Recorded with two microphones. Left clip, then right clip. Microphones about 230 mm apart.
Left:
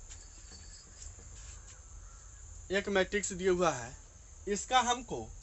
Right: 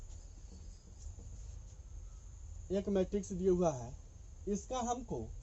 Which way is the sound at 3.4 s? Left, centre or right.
Left.